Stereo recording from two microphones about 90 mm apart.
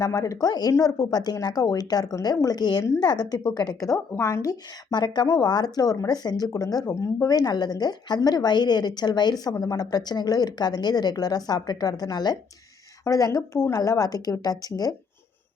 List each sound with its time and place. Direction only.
0.1 s speech: 40° left (ahead or behind)
4.9 s speech: 55° left (ahead or behind)